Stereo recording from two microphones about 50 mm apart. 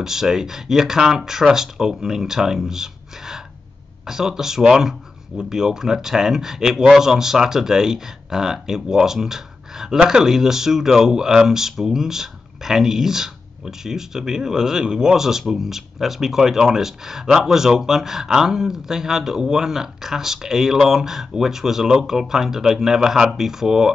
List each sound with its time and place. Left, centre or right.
0.0 s speech: centre